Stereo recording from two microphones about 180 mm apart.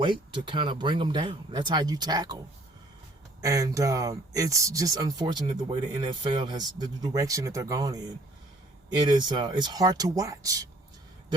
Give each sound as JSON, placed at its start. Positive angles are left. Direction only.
{"t": 0.0, "sound": "speech", "side_deg": -25}
{"t": 3.4, "sound": "speech", "side_deg": -20}